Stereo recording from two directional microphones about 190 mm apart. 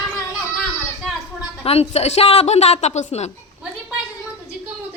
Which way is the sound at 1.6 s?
30° left (ahead or behind).